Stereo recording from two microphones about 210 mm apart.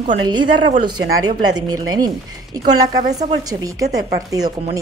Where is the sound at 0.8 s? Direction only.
20° right (ahead or behind).